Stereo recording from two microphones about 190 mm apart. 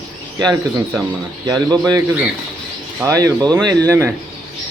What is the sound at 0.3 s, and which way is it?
Speech, 20° right (ahead or behind).